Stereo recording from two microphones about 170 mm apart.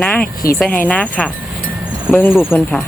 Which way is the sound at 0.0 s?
10° left (ahead or behind).